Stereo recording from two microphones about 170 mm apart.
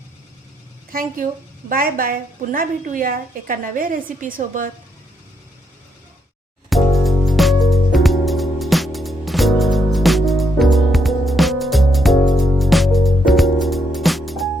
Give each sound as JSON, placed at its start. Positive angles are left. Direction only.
{"t": 0.9, "sound": "a woman's voice", "side_deg": -55}
{"t": 6.7, "sound": "music", "side_deg": 0}